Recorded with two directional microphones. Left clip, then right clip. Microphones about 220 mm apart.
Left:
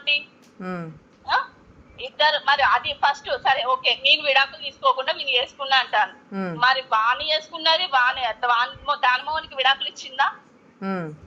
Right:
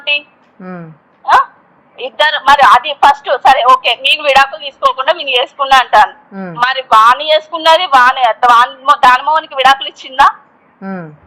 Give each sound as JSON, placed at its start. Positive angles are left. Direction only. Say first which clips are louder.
{"t": 0.6, "sound": "speech", "louder": "right 3 dB", "side_deg": -5}
{"t": 1.2, "sound": "a sound", "louder": "right 14 dB", "side_deg": -30}
{"t": 2.0, "sound": "a woman's voice", "louder": "right 8 dB", "side_deg": -30}
{"t": 6.3, "sound": "speech", "louder": "right 4 dB", "side_deg": -5}
{"t": 6.6, "sound": "a woman's voice", "louder": "right 12 dB", "side_deg": -30}
{"t": 10.8, "sound": "speech", "louder": "right 4 dB", "side_deg": -5}